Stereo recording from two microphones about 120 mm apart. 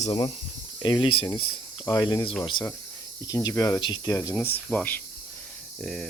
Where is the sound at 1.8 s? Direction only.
30° left (ahead or behind).